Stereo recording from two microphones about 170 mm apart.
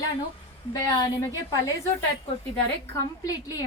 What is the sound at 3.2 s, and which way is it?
Speech, 20° left (ahead or behind).